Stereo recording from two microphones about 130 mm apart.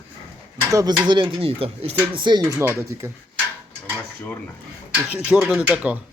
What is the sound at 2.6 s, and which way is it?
Speech, 20° right (ahead or behind).